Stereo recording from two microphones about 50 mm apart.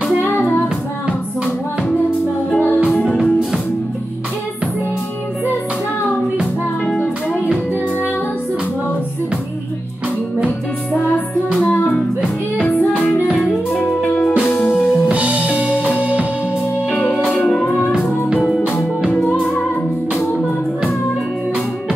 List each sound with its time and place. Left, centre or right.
1.0 s music: centre
3.2 s music: centre
12.6 s music: left
14.7 s music: centre
15.0 s music: right
16.9 s music: left